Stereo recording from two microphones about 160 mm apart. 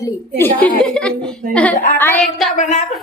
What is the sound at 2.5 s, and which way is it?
Speech, 50° left (ahead or behind).